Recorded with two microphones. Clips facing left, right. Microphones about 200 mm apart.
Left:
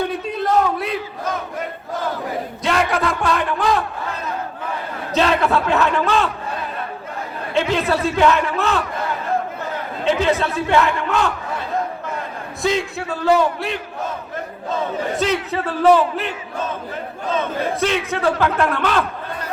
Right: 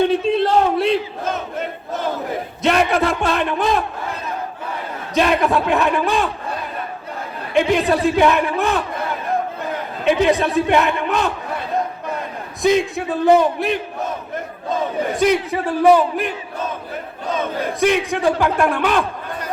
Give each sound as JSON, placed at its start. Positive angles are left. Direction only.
{"t": 0.0, "sound": "battle cry", "side_deg": -25}
{"t": 2.6, "sound": "speech", "side_deg": -20}
{"t": 5.1, "sound": "a man's voice", "side_deg": -15}
{"t": 7.5, "sound": "a man's voice", "side_deg": -15}
{"t": 10.0, "sound": "a man's voice", "side_deg": -15}
{"t": 12.6, "sound": "speech", "side_deg": -20}
{"t": 15.2, "sound": "a man's voice", "side_deg": -15}
{"t": 17.3, "sound": "a man's voice", "side_deg": -15}